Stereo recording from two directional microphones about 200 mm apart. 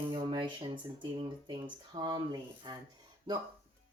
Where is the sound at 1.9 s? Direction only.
20° right (ahead or behind).